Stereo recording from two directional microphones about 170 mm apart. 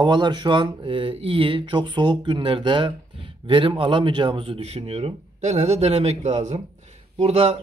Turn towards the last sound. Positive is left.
turn(degrees=-35)  # may be behind; listen again after turning